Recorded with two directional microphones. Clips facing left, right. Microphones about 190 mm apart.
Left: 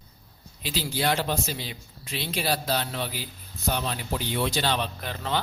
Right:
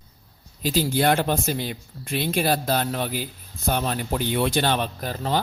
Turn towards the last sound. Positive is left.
turn(degrees=-40)  # may be behind; listen again after turning